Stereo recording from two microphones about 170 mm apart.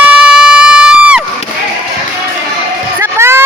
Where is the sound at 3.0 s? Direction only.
15° right (ahead or behind).